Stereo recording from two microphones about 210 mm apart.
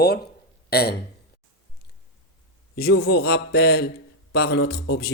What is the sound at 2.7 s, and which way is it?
Speech, 45° left (ahead or behind).